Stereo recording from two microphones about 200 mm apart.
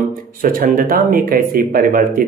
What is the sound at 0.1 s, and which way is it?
Speech, 45° right (ahead or behind).